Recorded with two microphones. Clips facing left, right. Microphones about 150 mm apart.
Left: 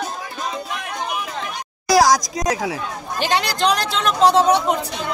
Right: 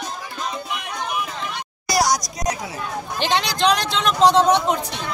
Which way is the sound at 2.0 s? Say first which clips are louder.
Left 1 dB; 90° left.